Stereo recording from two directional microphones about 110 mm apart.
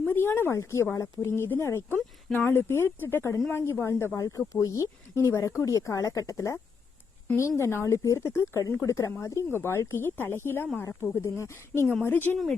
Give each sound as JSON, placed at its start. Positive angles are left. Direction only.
{"t": 0.0, "sound": "speech", "side_deg": 20}